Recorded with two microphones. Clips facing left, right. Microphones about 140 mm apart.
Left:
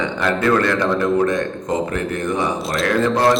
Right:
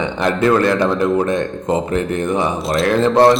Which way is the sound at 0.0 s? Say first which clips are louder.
Right 3 dB; 25° right (ahead or behind).